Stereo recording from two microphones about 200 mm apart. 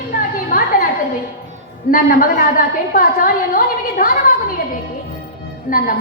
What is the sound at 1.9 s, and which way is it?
A woman's voice, 45° left (ahead or behind).